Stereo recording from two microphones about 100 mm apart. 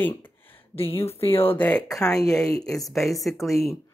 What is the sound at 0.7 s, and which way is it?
Speech, 70° left (ahead or behind).